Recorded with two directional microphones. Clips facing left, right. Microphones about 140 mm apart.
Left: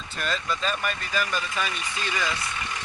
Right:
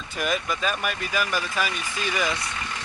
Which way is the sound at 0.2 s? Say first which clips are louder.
Right 3 dB; 10° right (ahead or behind).